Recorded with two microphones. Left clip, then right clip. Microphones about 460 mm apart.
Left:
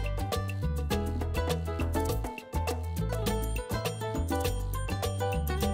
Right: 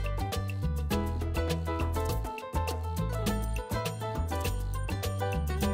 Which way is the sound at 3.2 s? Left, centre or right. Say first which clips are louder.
Left 2 dB; left.